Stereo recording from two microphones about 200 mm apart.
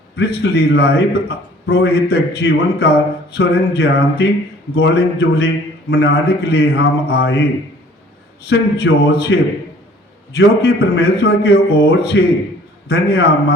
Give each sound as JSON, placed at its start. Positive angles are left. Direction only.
{"t": 0.2, "sound": "a man's voice", "side_deg": 55}
{"t": 8.4, "sound": "a man's voice", "side_deg": 55}